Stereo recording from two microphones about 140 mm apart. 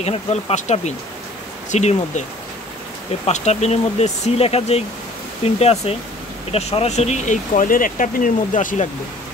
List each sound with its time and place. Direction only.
0.0 s speech: 50° left (ahead or behind)
3.3 s speech: 55° left (ahead or behind)